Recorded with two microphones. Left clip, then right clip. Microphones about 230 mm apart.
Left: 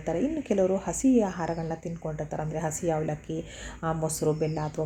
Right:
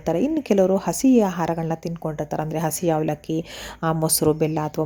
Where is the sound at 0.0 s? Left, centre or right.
Right.